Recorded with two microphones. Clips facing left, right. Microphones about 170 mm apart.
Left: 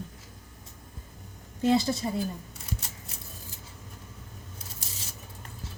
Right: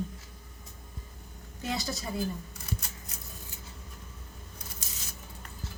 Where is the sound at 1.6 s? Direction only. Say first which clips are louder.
Left 10 dB; 30° left (ahead or behind).